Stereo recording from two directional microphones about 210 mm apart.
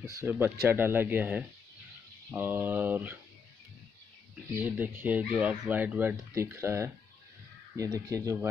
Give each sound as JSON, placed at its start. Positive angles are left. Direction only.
{"t": 0.0, "sound": "speech", "side_deg": -10}
{"t": 4.6, "sound": "speech", "side_deg": -10}